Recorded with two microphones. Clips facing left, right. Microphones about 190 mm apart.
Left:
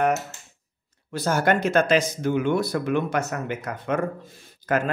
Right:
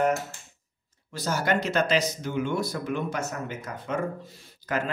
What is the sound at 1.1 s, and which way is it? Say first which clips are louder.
Speech: left 5 dB; 55° left (ahead or behind).